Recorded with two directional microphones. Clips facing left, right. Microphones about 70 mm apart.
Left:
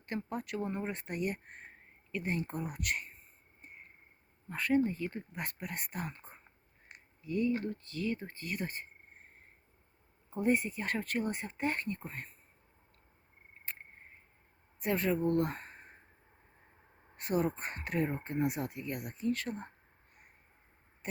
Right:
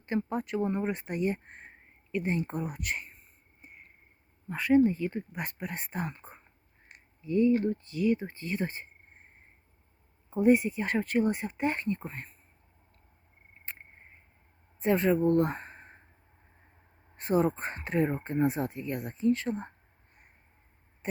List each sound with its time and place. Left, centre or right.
0.0 s speech: right
4.4 s speech: centre
5.3 s speech: right
10.2 s speech: right
13.7 s a sound: right
14.8 s speech: right
17.2 s speech: right
21.0 s a sound: right